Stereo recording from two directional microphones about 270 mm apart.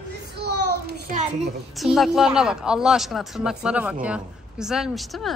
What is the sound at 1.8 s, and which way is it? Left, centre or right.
A woman's voice, centre.